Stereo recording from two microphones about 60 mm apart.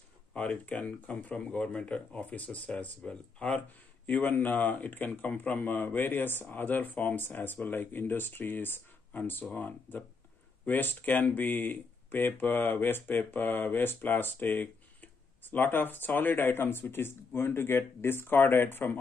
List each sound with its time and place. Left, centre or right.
0.3 s speech: left